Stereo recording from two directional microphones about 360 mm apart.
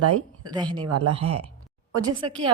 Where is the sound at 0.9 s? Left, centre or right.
Right.